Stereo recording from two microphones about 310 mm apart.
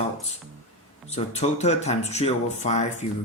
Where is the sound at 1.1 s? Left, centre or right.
Left.